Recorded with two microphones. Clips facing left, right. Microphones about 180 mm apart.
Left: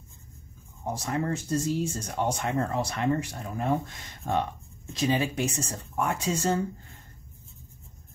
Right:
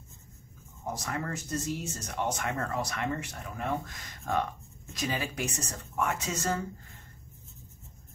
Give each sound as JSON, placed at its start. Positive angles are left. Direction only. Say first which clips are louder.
{"t": 0.8, "sound": "speech", "louder": "left 5 dB", "side_deg": 25}